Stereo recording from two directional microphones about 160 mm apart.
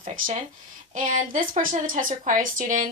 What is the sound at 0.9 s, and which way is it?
A woman's voice, 55° right (ahead or behind).